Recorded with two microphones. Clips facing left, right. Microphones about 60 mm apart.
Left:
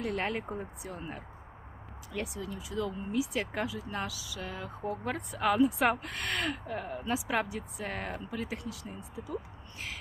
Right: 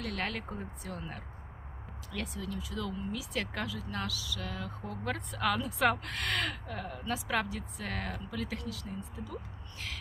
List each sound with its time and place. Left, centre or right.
0.0 s speech: left